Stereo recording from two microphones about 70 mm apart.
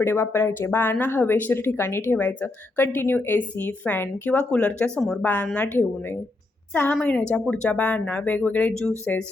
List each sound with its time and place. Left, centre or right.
0.0 s a woman's voice: left
4.3 s speech: centre
5.2 s a woman's voice: left